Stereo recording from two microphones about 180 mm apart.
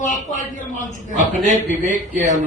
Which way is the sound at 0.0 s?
45° left (ahead or behind).